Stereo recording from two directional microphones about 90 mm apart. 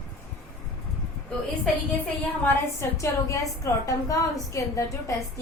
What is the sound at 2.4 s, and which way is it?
Speech, 20° left (ahead or behind).